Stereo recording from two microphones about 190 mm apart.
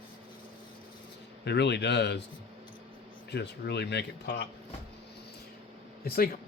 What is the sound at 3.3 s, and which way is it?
Speech, 60° left (ahead or behind).